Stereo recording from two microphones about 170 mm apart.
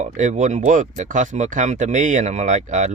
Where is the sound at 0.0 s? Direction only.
45° right (ahead or behind).